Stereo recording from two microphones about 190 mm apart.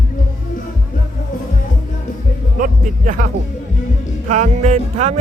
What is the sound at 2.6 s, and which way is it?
Music, 45° right (ahead or behind).